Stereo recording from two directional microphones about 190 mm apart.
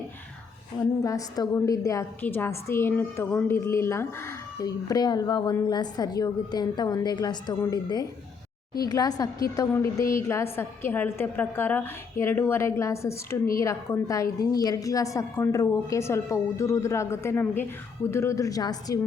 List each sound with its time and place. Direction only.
1.0 s a woman's voice: 15° left (ahead or behind)